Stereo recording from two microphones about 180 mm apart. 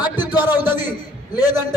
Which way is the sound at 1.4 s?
15° right (ahead or behind).